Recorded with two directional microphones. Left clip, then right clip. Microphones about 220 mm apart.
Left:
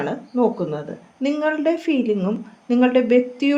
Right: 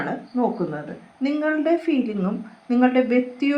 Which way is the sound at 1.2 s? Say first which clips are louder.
Left 2 dB; 55° left (ahead or behind).